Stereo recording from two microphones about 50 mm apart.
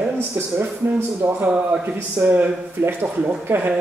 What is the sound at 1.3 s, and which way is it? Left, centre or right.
Speech, right.